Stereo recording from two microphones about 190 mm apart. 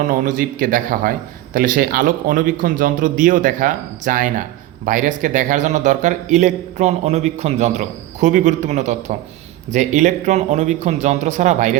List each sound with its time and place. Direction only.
0.1 s a man's voice: 45° right (ahead or behind)